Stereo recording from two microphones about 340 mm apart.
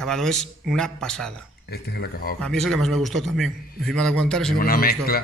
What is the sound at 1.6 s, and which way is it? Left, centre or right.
Speech, left.